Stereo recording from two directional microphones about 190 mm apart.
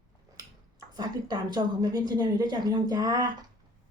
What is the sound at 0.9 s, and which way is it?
A woman's voice, 20° right (ahead or behind).